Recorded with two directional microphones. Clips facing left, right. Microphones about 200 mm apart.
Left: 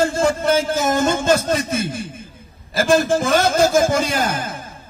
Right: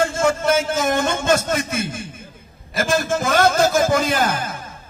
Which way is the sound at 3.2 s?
55° right (ahead or behind).